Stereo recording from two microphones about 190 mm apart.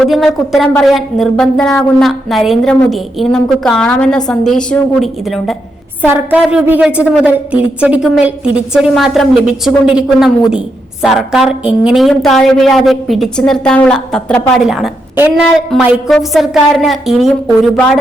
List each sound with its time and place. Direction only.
0.0 s a woman's voice: centre (ahead or behind)